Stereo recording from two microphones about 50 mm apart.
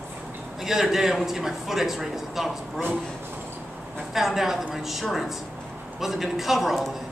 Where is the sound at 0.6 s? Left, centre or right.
Centre.